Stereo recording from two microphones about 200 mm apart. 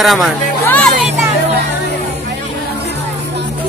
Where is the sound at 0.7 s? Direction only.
5° left (ahead or behind).